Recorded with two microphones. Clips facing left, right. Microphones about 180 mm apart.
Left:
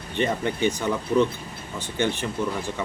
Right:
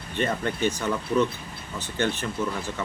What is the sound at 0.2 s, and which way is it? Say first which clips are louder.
Speech: left 2 dB; 15° left (ahead or behind).